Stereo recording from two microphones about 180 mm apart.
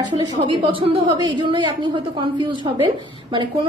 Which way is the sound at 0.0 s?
30° right (ahead or behind).